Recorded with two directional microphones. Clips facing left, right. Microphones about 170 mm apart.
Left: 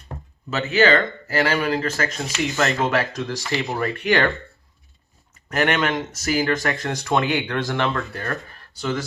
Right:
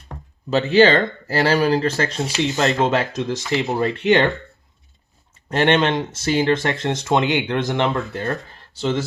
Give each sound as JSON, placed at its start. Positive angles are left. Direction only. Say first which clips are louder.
{"t": 0.5, "sound": "speech", "louder": "right 4 dB", "side_deg": -30}
{"t": 5.5, "sound": "speech", "louder": "right 4 dB", "side_deg": -25}